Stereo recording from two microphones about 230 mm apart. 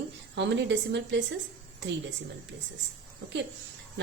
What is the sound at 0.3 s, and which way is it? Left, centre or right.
Speech, right.